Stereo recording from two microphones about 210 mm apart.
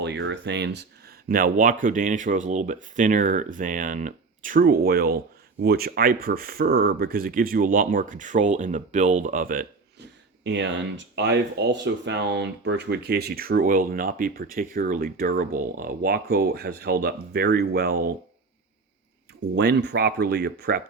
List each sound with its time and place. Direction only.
0.0 s speech: 55° right (ahead or behind)
1.3 s speech: 40° right (ahead or behind)
10.4 s speech: 55° right (ahead or behind)
19.5 s speech: 50° right (ahead or behind)